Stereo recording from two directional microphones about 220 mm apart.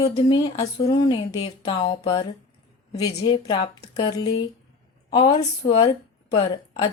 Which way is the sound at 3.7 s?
15° left (ahead or behind).